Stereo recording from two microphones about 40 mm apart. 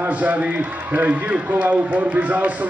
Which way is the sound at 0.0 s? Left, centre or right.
Right.